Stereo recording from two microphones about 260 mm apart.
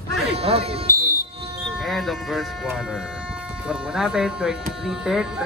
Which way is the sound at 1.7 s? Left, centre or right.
Centre.